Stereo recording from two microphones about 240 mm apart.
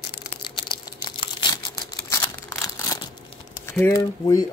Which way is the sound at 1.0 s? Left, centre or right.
Centre.